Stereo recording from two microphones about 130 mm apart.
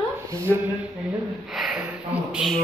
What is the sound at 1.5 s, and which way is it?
Speech, 5° right (ahead or behind).